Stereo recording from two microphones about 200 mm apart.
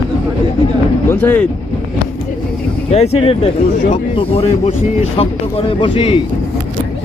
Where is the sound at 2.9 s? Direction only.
30° left (ahead or behind).